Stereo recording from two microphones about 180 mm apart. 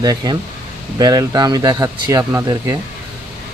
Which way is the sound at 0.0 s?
20° right (ahead or behind).